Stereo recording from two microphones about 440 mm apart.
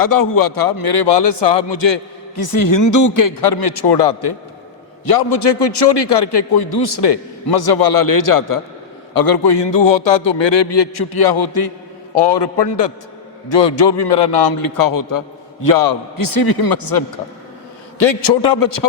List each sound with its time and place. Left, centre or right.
0.0 s a man's voice: left
18.0 s a man's voice: left